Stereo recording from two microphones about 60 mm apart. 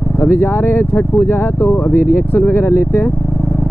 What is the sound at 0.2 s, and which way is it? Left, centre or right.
Speech, left.